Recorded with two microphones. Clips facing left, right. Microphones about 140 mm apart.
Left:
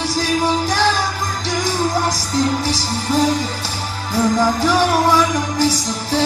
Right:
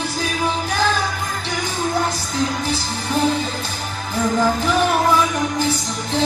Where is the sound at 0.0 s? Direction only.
35° left (ahead or behind).